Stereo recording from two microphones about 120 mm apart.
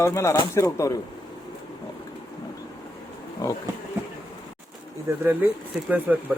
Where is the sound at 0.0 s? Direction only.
25° left (ahead or behind).